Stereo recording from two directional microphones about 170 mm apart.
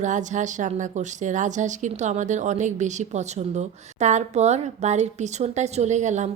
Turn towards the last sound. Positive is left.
turn(degrees=-45)  # may be behind; listen again after turning